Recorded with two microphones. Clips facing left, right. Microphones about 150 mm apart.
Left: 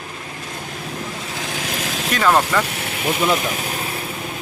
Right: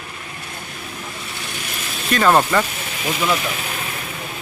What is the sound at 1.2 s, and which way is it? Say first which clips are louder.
Vehicle: left 4 dB; 90° left.